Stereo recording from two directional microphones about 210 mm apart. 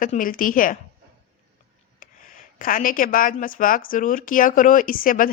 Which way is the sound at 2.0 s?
40° left (ahead or behind).